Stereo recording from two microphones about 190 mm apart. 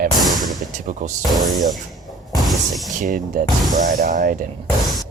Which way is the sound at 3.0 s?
45° right (ahead or behind).